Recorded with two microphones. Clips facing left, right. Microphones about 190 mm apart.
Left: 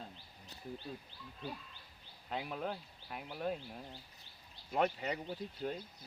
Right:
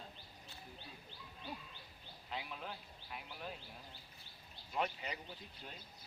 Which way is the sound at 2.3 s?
45° left (ahead or behind).